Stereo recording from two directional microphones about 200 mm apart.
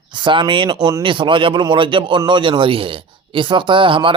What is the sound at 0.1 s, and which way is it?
Speech, 25° right (ahead or behind).